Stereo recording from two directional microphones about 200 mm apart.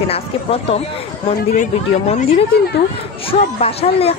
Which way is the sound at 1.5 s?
40° left (ahead or behind).